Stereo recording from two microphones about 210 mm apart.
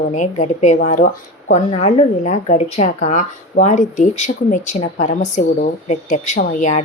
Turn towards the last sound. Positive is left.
turn(degrees=40)  # may be behind; listen again after turning